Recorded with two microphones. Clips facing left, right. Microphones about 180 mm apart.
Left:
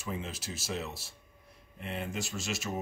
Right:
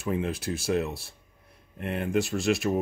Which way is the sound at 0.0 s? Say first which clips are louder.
Right 10 dB; 60° right (ahead or behind).